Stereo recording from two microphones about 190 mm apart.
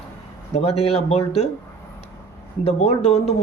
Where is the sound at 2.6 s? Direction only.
35° left (ahead or behind).